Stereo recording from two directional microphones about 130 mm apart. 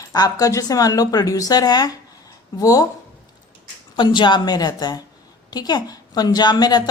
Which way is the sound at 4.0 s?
40° left (ahead or behind).